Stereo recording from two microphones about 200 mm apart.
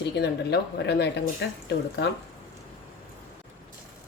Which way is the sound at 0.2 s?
55° left (ahead or behind).